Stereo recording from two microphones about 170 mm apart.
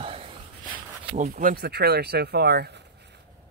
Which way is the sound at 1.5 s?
75° right (ahead or behind).